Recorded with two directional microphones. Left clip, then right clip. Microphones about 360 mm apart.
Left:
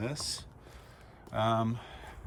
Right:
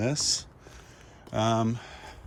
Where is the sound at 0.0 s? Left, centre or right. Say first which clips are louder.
Right 9 dB; centre.